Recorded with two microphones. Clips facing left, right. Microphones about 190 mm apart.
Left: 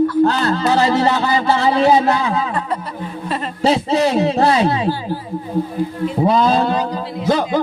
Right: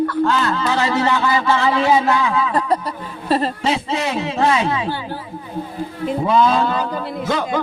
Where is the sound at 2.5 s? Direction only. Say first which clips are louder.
Right 3 dB; 35° right (ahead or behind).